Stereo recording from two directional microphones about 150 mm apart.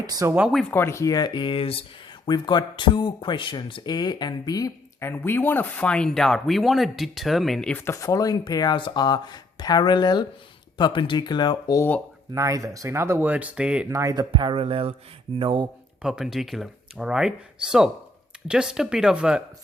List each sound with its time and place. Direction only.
0.0 s speech: 25° right (ahead or behind)
0.3 s speech: 5° right (ahead or behind)
0.7 s speech: 15° left (ahead or behind)
7.9 s speech: 20° left (ahead or behind)
11.8 s speech: 10° left (ahead or behind)
12.3 s speech: 20° right (ahead or behind)
13.9 s speech: 25° right (ahead or behind)
14.3 s speech: 35° right (ahead or behind)
16.0 s speech: 5° right (ahead or behind)